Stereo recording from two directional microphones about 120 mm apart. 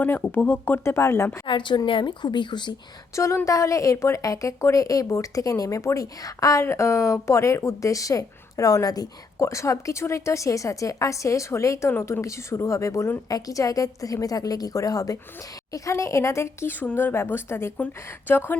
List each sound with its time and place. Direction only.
0.0 s speech: 15° left (ahead or behind)
1.5 s a woman's voice: 40° left (ahead or behind)
3.2 s speech: 25° left (ahead or behind)